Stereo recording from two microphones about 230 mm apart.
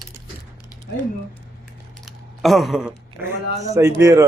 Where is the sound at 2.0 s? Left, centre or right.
Centre.